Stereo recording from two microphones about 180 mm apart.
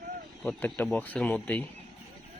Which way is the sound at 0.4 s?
10° left (ahead or behind).